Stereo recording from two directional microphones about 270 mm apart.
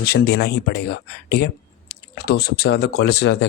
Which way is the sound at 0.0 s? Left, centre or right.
Left.